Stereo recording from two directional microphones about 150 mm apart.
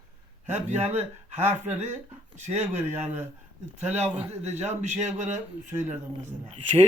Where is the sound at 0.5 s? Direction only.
50° right (ahead or behind).